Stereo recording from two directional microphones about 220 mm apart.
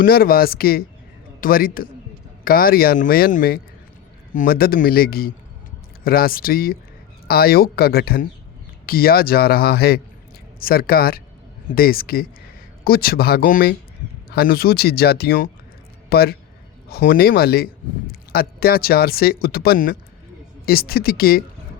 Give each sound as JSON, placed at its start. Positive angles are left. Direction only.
{"t": 0.0, "sound": "a man's voice", "side_deg": 40}